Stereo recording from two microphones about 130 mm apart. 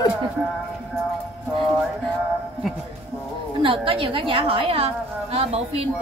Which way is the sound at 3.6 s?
45° right (ahead or behind).